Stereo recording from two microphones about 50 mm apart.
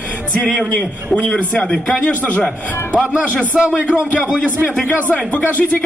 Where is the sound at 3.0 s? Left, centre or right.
Right.